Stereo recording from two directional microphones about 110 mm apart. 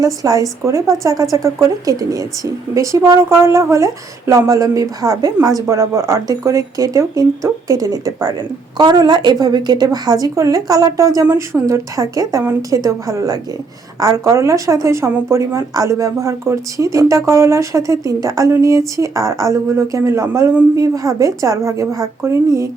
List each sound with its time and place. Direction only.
0.0 s a woman's voice: 35° right (ahead or behind)